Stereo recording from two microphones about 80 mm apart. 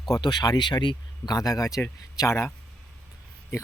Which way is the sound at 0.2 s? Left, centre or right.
Left.